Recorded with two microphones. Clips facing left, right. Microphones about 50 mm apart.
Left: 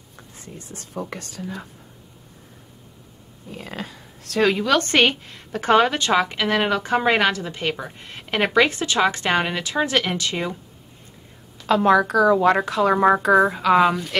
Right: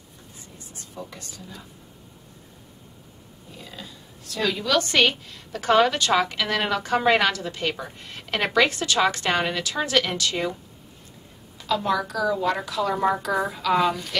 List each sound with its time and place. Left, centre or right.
0.6 s speech: left
3.5 s speech: left
4.5 s speech: left
5.0 s a woman's voice: left
11.6 s speech: left